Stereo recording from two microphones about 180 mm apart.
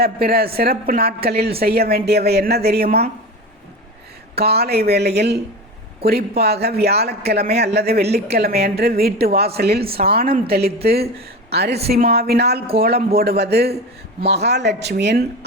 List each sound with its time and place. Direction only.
0.0 s a woman's voice: 60° right (ahead or behind)
4.4 s a woman's voice: 60° right (ahead or behind)